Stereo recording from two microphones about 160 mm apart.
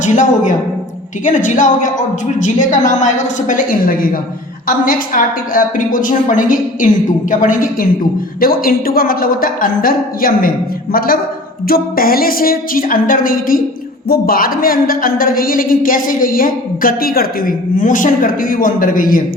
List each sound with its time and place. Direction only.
0.0 s a woman's voice: 50° left (ahead or behind)